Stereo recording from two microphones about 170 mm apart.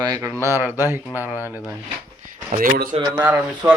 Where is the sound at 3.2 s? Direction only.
10° right (ahead or behind).